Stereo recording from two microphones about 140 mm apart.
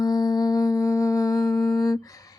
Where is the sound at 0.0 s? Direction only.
30° left (ahead or behind).